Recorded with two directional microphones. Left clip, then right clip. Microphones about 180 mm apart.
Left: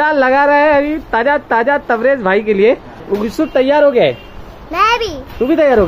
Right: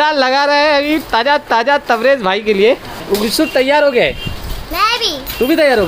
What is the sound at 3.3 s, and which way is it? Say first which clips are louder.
Speech: even; 5° left (ahead or behind).